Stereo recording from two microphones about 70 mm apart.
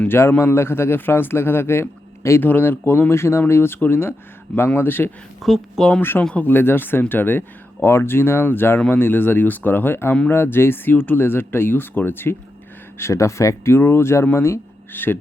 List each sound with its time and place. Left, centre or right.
0.1 s a man's voice: left
2.4 s speech: left
3.1 s a man's voice: left
5.4 s speech: centre
6.0 s a man's voice: left
13.0 s speech: left
13.7 s a man's voice: left